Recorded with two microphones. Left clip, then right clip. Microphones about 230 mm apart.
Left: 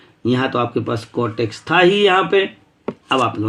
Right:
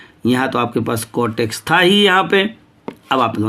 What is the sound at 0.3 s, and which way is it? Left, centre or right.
Speech, right.